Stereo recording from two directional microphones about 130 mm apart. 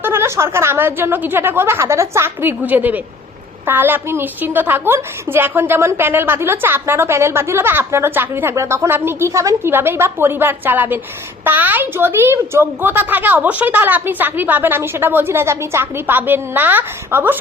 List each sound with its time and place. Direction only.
0.0 s a woman's voice: 20° right (ahead or behind)